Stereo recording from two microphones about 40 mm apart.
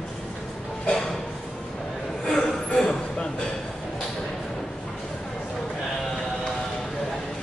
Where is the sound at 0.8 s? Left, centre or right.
Centre.